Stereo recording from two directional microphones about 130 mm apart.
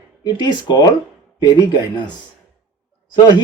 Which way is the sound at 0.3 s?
35° left (ahead or behind).